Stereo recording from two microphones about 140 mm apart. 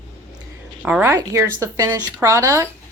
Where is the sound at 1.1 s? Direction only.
20° right (ahead or behind).